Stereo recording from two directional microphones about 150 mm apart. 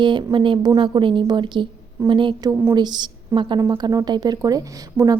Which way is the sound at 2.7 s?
30° right (ahead or behind).